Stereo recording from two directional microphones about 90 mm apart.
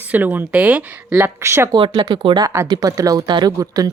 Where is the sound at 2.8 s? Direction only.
40° right (ahead or behind).